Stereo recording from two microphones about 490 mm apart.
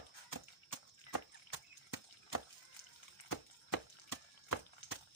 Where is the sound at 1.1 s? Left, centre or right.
Left.